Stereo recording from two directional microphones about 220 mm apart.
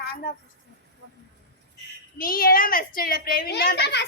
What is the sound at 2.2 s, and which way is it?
A child's voice, 40° left (ahead or behind).